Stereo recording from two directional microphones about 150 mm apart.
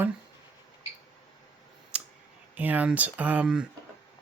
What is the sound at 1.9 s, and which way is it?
Clicking, 5° right (ahead or behind).